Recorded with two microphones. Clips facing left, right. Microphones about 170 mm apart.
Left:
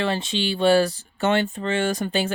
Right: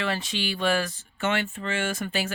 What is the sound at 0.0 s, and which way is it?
Speech, 30° left (ahead or behind).